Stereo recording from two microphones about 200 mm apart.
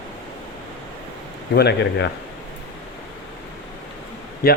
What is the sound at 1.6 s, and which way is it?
Speech, 55° left (ahead or behind).